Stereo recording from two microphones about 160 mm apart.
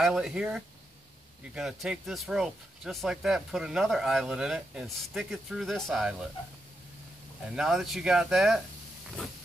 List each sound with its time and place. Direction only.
0.0 s speech: centre (ahead or behind)
7.5 s speech: centre (ahead or behind)